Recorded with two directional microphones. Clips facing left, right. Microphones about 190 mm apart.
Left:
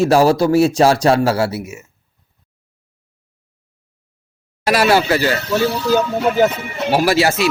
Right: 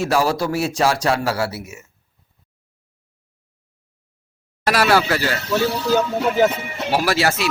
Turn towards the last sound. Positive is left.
turn(degrees=5)  # may be behind; listen again after turning